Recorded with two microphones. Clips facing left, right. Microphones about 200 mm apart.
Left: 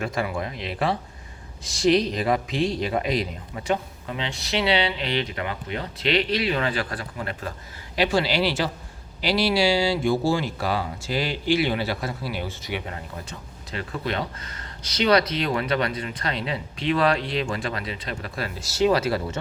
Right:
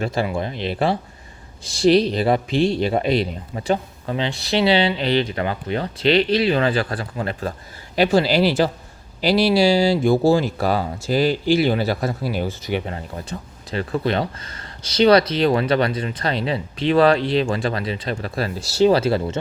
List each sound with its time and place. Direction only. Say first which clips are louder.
0.0 s speech: right 4 dB; 30° right (ahead or behind)
7.9 s speech: right 6 dB; 45° right (ahead or behind); by 19.4 s 25° right (ahead or behind)